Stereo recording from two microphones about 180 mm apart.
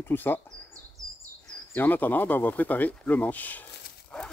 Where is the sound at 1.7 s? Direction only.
10° left (ahead or behind).